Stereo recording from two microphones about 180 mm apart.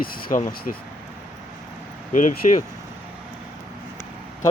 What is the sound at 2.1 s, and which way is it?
Speech, 45° left (ahead or behind).